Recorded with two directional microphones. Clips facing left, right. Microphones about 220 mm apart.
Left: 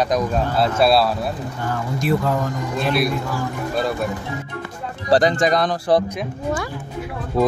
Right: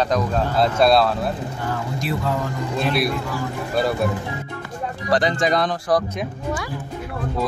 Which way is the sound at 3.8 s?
Centre (ahead or behind).